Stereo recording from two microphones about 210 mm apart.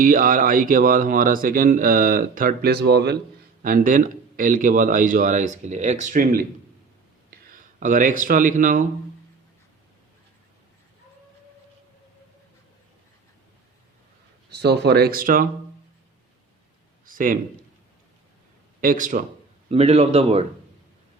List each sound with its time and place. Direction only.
0.0 s speech: 40° right (ahead or behind)
3.6 s speech: 40° right (ahead or behind)
14.6 s speech: 50° right (ahead or behind)
17.1 s a sound: 40° right (ahead or behind)
18.8 s speech: 40° right (ahead or behind)